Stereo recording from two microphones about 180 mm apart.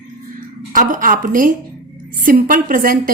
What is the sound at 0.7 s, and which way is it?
Speech, 50° right (ahead or behind).